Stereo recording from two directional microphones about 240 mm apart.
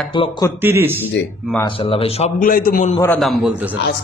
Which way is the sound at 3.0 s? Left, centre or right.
Centre.